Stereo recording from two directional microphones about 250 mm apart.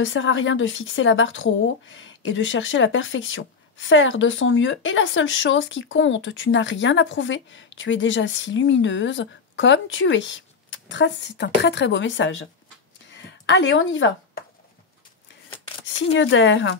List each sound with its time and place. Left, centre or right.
0.0 s a woman's voice: left
13.1 s a sound: left
16.1 s a woman's voice: left